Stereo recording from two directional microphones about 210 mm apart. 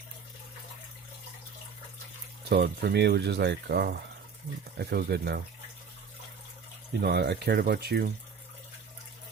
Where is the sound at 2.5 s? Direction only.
50° right (ahead or behind).